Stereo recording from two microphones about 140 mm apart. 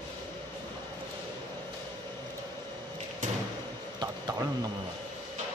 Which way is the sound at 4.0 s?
25° right (ahead or behind).